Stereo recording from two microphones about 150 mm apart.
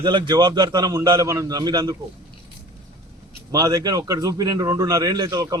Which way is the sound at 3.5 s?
25° right (ahead or behind).